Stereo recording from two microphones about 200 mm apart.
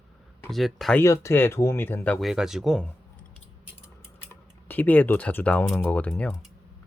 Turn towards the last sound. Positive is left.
turn(degrees=0)  # may be behind; listen again after turning